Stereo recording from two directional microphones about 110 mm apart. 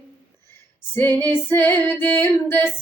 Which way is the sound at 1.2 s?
20° left (ahead or behind).